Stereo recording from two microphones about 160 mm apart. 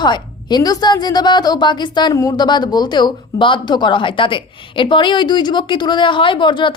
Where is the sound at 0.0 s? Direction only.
25° left (ahead or behind).